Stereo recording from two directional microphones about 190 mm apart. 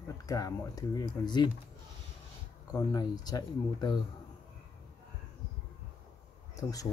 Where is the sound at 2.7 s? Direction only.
20° left (ahead or behind).